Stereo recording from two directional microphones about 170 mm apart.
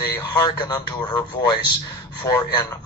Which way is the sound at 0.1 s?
20° left (ahead or behind).